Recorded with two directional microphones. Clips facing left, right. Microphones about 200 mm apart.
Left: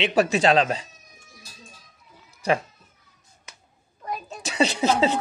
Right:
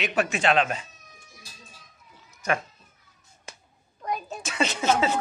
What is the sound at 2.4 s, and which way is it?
Speech, 35° left (ahead or behind).